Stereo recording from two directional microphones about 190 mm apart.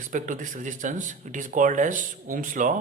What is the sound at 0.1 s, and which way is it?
Speech, 45° right (ahead or behind).